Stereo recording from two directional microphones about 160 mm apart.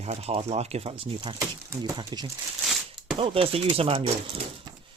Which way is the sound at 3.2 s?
35° right (ahead or behind).